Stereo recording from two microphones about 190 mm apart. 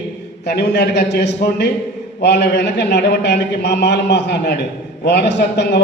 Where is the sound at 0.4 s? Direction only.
60° left (ahead or behind).